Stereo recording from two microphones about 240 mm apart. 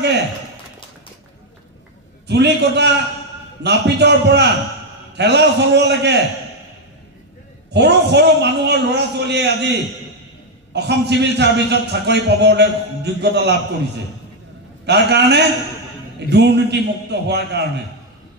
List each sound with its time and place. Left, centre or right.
2.2 s a man's voice: right
7.7 s a man's voice: right
14.9 s a man's voice: right